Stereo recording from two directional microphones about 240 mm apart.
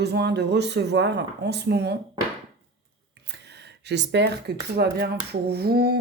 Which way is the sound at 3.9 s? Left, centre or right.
Right.